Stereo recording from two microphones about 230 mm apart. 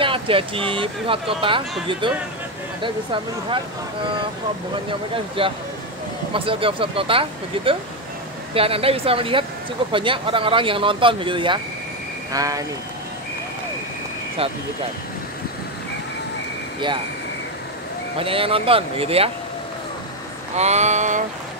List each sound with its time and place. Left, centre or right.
0.0 s speech: right
5.1 s speech: right
18.2 s speech: right
20.5 s speech: right